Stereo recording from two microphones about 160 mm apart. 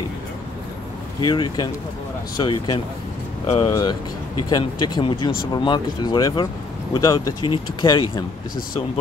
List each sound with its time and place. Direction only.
1.2 s speech: 30° left (ahead or behind)